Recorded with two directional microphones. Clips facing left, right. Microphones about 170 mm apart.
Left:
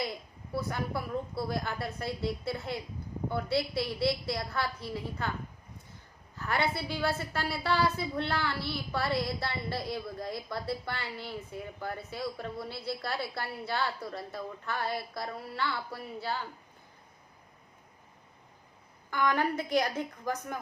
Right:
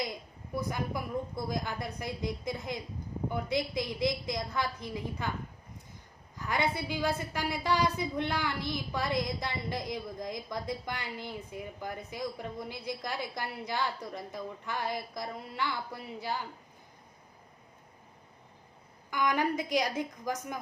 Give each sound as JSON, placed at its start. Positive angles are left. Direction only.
{"t": 0.0, "sound": "a sound", "side_deg": -15}
{"t": 1.5, "sound": "a woman's voice", "side_deg": -15}
{"t": 6.3, "sound": "a woman's voice", "side_deg": -15}
{"t": 19.1, "sound": "a woman's voice", "side_deg": -15}